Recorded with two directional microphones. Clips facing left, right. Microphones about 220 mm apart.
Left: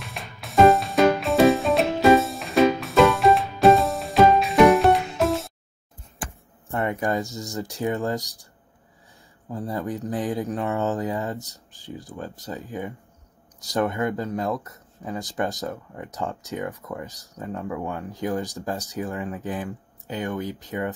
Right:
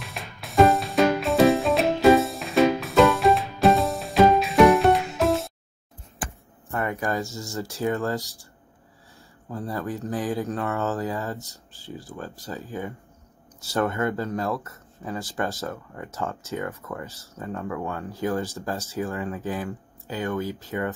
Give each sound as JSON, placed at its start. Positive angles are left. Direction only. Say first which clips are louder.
{"t": 0.0, "sound": "music", "louder": "even", "side_deg": 0}
{"t": 6.7, "sound": "a sound", "louder": "left 2 dB", "side_deg": 20}
{"t": 7.3, "sound": "speech", "louder": "left 1 dB", "side_deg": 15}
{"t": 9.5, "sound": "speech", "louder": "left 1 dB", "side_deg": 15}